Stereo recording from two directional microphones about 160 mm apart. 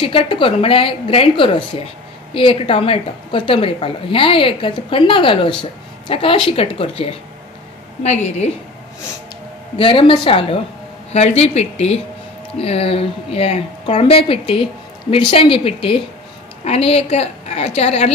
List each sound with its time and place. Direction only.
0.0 s a woman's voice: 35° left (ahead or behind)
9.8 s a woman's voice: 35° left (ahead or behind)